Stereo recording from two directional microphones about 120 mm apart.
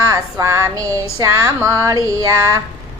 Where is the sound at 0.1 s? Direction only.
25° right (ahead or behind).